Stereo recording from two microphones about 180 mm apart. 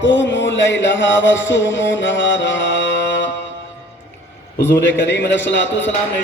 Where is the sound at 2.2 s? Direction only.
90° left.